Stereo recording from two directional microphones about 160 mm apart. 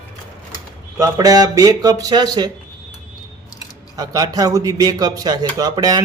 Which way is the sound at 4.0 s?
25° right (ahead or behind).